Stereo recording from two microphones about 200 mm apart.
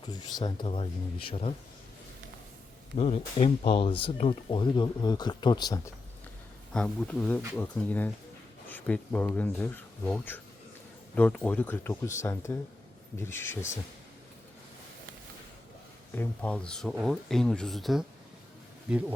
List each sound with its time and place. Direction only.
0.1 s speech: 20° left (ahead or behind)
3.0 s speech: 30° left (ahead or behind)
6.7 s speech: 5° left (ahead or behind)
16.1 s speech: 5° left (ahead or behind)